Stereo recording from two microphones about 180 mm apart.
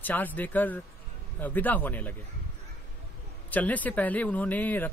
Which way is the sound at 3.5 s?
10° left (ahead or behind).